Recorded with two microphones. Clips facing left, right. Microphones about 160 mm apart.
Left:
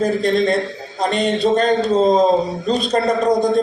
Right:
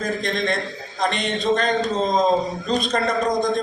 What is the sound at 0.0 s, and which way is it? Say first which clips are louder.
A man's voice: left 8 dB; 35° left (ahead or behind).